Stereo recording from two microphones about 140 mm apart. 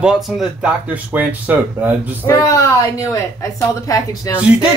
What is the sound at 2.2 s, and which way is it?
Speech, 25° left (ahead or behind).